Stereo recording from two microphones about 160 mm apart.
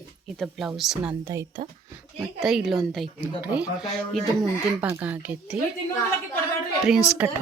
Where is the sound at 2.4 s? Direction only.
Centre (ahead or behind).